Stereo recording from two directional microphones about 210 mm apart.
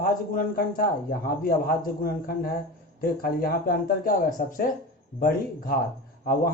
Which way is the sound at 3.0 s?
45° left (ahead or behind).